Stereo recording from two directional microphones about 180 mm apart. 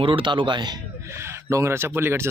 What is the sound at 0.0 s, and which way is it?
Speech, 30° right (ahead or behind).